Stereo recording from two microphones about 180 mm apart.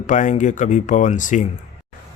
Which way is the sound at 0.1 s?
45° left (ahead or behind).